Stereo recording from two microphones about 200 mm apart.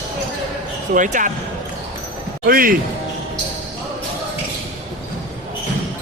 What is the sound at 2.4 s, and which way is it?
Speech, 45° right (ahead or behind).